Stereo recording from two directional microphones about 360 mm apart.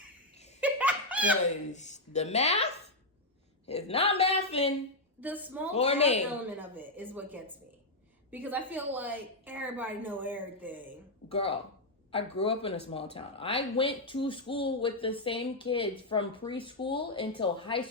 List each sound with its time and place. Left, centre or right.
0.6 s laughter: centre
1.7 s speech: centre
3.7 s speech: centre
5.2 s a woman's voice: centre
5.7 s speech: centre
6.2 s a woman's voice: centre
11.3 s speech: centre